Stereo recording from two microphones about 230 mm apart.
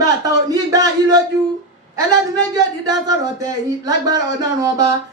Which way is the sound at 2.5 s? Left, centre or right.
Centre.